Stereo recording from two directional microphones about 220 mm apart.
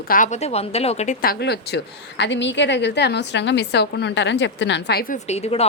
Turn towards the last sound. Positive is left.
turn(degrees=30)  # may be behind; listen again after turning